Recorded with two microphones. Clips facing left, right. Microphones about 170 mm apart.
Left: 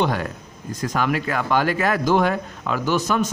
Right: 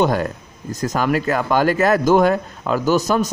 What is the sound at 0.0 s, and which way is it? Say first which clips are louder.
A man's voice: right 5 dB; 45° right (ahead or behind).